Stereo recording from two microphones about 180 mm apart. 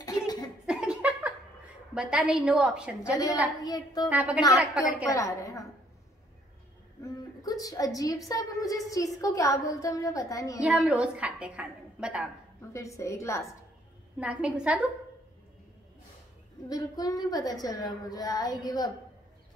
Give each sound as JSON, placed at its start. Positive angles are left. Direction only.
{"t": 0.0, "sound": "a sound", "side_deg": 20}
{"t": 0.7, "sound": "a sound", "side_deg": -5}
{"t": 2.0, "sound": "a woman's voice", "side_deg": -5}
{"t": 3.6, "sound": "a woman's voice", "side_deg": 20}
{"t": 4.1, "sound": "a woman's voice", "side_deg": -5}
{"t": 5.1, "sound": "a woman's voice", "side_deg": 15}
{"t": 7.0, "sound": "a woman's voice", "side_deg": 20}
{"t": 10.6, "sound": "a woman's voice", "side_deg": -5}
{"t": 12.7, "sound": "a woman's voice", "side_deg": 15}
{"t": 14.2, "sound": "a woman's voice", "side_deg": -5}
{"t": 16.6, "sound": "a woman's voice", "side_deg": 20}